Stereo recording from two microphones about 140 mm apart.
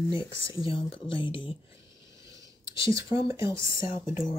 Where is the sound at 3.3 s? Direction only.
20° right (ahead or behind).